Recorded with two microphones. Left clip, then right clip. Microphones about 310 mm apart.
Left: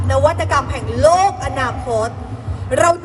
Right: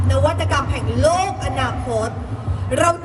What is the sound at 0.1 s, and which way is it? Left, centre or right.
A woman's voice, left.